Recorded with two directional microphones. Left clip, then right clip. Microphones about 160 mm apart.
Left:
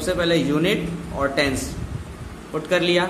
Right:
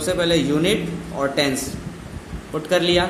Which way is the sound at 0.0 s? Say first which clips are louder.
Right 1 dB; 15° right (ahead or behind).